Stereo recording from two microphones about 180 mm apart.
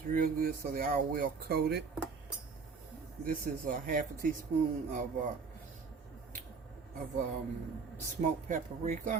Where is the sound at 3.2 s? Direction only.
50° right (ahead or behind).